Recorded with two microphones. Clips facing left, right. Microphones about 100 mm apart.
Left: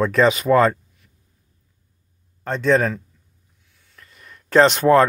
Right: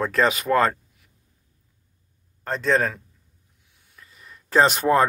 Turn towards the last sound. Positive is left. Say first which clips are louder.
# left 4 dB
turn(degrees=-5)  # may be behind; listen again after turning